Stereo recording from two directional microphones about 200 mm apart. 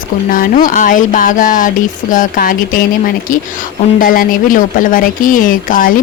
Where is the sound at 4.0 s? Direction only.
40° left (ahead or behind).